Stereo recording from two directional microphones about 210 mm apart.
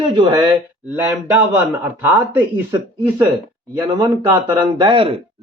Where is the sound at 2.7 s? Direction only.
20° right (ahead or behind).